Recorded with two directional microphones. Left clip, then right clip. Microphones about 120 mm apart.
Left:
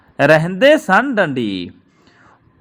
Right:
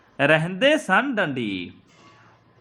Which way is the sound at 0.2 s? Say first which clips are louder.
Left 7 dB; 40° left (ahead or behind).